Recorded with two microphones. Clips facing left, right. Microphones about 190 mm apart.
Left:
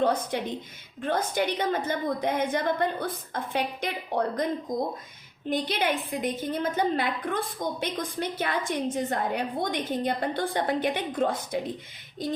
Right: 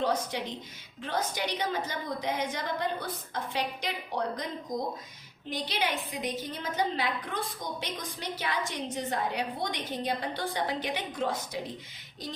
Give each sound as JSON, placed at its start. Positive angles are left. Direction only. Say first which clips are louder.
{"t": 0.0, "sound": "a woman's voice", "louder": "left 4 dB", "side_deg": 55}
{"t": 5.5, "sound": "a woman's voice", "louder": "left 5 dB", "side_deg": 55}